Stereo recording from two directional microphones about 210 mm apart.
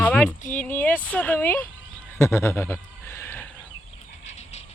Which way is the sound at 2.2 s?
10° left (ahead or behind).